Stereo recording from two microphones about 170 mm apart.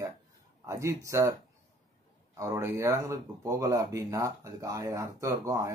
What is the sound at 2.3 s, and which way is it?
Speech, 15° right (ahead or behind).